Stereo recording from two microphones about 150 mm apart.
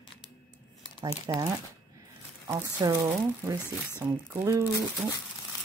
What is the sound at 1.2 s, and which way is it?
Speech, 25° right (ahead or behind).